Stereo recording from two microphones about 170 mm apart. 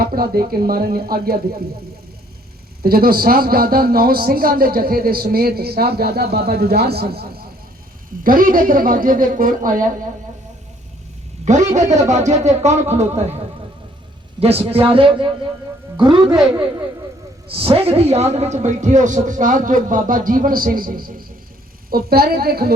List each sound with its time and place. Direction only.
0.0 s a man's voice: 60° right (ahead or behind)
2.8 s a man's voice: 60° right (ahead or behind)
11.4 s a man's voice: 45° right (ahead or behind)
14.3 s a woman's voice: 35° right (ahead or behind)
17.5 s a man's voice: 35° right (ahead or behind); by 22.7 s 65° right (ahead or behind)